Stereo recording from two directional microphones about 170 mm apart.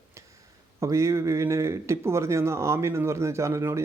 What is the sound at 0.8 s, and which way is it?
Speech, 15° right (ahead or behind).